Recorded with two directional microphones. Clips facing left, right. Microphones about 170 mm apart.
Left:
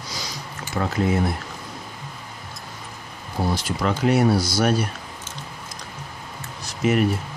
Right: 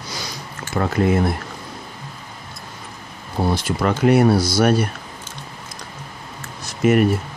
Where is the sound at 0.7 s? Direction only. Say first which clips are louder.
Right 4 dB; 55° right (ahead or behind).